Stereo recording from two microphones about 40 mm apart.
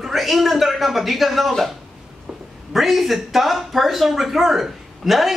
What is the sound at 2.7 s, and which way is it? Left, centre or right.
Speech, centre.